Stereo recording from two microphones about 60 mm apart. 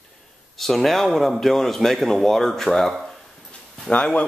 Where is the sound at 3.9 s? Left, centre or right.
Left.